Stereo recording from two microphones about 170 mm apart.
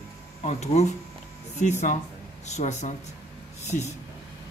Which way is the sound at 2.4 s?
45° left (ahead or behind).